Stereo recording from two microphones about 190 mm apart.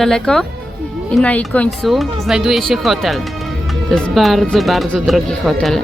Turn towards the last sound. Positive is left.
turn(degrees=0)  # may be behind; listen again after turning